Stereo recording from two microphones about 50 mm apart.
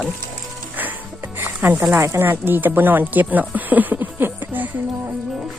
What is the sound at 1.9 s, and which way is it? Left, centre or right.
Speech, right.